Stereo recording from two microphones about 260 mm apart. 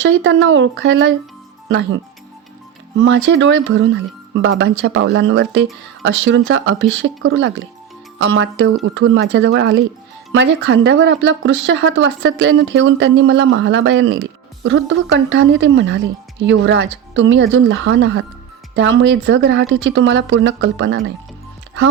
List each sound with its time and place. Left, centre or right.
0.0 s speech: right
3.0 s speech: right